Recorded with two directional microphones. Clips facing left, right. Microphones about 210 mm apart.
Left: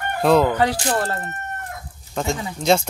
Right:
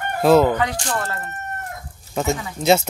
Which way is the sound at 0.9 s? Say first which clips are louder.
Left 3 dB; 30° left (ahead or behind).